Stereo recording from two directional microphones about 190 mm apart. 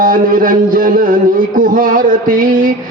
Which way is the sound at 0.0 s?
45° right (ahead or behind).